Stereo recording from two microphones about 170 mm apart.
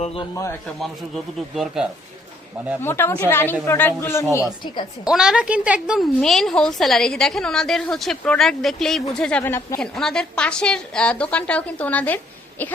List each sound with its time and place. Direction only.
0.0 s a man's voice: 35° left (ahead or behind)
1.5 s a woman's voice: centre (ahead or behind)
2.8 s a woman's voice: 15° left (ahead or behind)
5.0 s a woman's voice: 5° right (ahead or behind)
9.4 s a woman's voice: 15° left (ahead or behind)
9.8 s a woman's voice: 5° left (ahead or behind)